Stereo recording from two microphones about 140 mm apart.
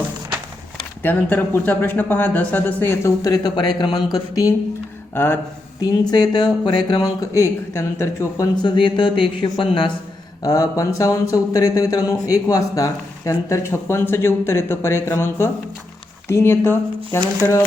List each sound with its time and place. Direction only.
1.0 s speech: 15° left (ahead or behind)
3.2 s speech: 25° left (ahead or behind)
5.8 s speech: 30° left (ahead or behind)
8.6 s speech: 35° left (ahead or behind)
10.4 s speech: 25° left (ahead or behind)